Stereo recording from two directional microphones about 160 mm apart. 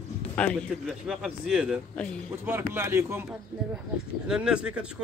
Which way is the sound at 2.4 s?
15° right (ahead or behind).